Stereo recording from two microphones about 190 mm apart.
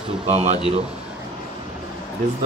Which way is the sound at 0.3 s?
35° right (ahead or behind).